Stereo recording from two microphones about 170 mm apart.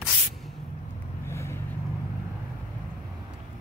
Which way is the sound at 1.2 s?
15° left (ahead or behind).